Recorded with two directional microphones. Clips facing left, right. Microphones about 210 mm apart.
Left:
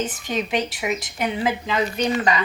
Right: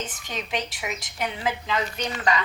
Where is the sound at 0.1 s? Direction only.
10° left (ahead or behind).